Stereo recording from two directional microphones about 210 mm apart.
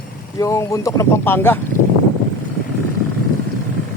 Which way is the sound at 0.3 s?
15° left (ahead or behind).